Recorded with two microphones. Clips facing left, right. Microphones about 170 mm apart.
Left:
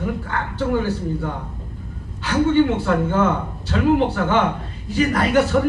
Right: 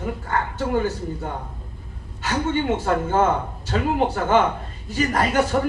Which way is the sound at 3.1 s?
45° right (ahead or behind).